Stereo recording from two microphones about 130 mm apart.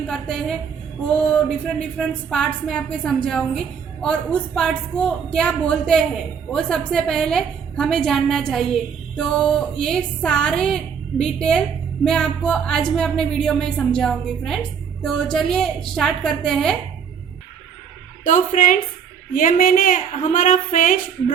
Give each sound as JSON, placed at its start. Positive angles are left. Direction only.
{"t": 0.1, "sound": "speech", "side_deg": 5}
{"t": 18.3, "sound": "a woman's voice", "side_deg": 75}